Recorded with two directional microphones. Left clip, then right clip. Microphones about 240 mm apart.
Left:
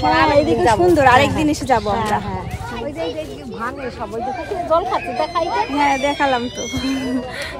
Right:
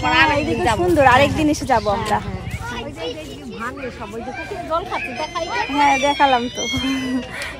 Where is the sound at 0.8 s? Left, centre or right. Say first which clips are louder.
Right 1 dB; centre.